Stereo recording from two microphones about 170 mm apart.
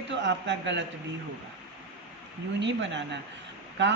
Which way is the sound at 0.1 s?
90° right.